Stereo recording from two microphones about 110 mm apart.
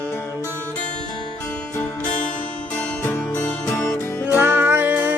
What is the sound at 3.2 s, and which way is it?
Music, 15° left (ahead or behind).